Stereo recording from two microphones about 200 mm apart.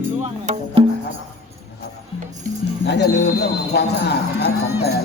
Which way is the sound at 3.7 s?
55° left (ahead or behind).